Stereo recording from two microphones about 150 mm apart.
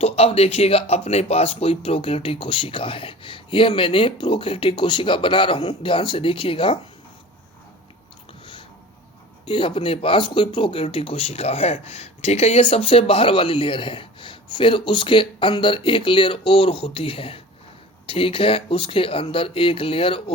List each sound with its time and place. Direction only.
0.0 s speech: 40° left (ahead or behind)
9.5 s speech: 35° left (ahead or behind)